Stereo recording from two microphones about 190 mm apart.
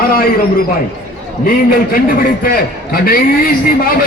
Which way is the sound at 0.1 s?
50° left (ahead or behind).